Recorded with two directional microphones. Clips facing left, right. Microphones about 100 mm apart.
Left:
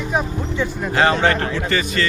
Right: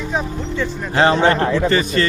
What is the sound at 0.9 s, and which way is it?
A man's voice, 25° right (ahead or behind).